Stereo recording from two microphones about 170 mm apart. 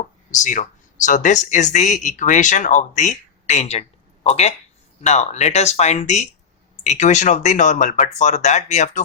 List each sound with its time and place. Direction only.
0.3 s speech: 50° left (ahead or behind)